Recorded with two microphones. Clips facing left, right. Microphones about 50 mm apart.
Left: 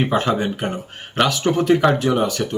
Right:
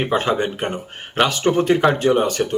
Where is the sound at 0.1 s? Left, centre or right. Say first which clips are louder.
Even; right.